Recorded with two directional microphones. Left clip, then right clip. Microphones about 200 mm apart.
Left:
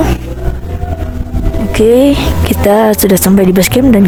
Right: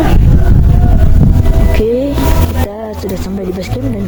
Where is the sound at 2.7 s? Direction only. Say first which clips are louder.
Left 13 dB; 45° left (ahead or behind).